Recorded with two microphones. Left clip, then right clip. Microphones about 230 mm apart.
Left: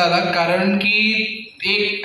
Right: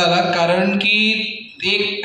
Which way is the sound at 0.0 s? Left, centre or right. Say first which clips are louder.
Right 1 dB; right.